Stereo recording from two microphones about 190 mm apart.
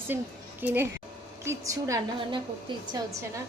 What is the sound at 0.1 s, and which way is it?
A woman's voice, 10° right (ahead or behind).